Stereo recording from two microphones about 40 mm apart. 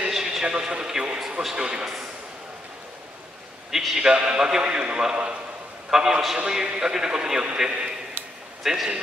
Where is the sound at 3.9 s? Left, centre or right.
Right.